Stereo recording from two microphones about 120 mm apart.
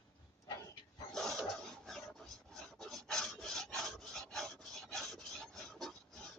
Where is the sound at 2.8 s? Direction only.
5° left (ahead or behind).